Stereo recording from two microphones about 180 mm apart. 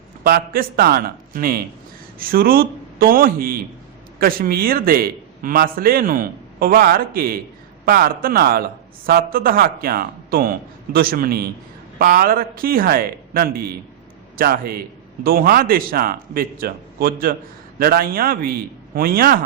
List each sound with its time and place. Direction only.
0.3 s a man's voice: 55° right (ahead or behind)